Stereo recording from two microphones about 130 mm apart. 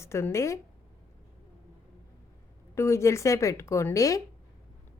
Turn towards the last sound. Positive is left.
turn(degrees=25)  # may be behind; listen again after turning